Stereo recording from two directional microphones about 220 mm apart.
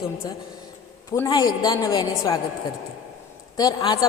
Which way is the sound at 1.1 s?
15° left (ahead or behind).